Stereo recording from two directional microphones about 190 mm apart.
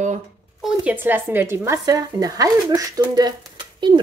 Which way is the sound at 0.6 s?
10° right (ahead or behind).